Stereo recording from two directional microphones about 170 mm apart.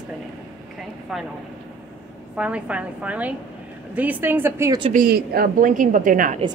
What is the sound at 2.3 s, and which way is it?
A woman's voice, 5° right (ahead or behind).